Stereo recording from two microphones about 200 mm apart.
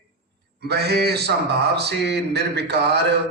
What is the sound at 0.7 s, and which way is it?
Speech, 55° right (ahead or behind).